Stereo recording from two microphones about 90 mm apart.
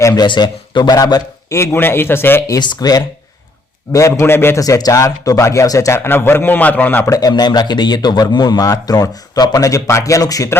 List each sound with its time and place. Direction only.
0.1 s a man's voice: 50° left (ahead or behind)
1.5 s a man's voice: 25° left (ahead or behind)
2.6 s a man's voice: 50° left (ahead or behind)
4.1 s a man's voice: 25° left (ahead or behind)
4.6 s speech: 40° left (ahead or behind); by 7.0 s 20° left (ahead or behind)
7.1 s a man's voice: 45° left (ahead or behind)